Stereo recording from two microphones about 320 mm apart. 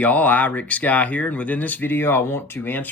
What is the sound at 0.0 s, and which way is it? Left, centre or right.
Speech, centre.